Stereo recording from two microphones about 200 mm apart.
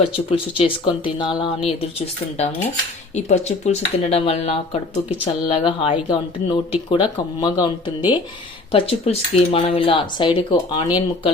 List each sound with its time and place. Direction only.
0.0 s speech: 30° left (ahead or behind)